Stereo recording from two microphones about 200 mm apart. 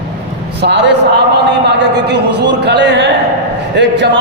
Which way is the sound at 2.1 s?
60° right (ahead or behind).